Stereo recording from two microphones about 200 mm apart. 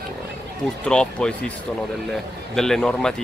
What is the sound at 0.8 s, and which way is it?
Speech, 5° left (ahead or behind).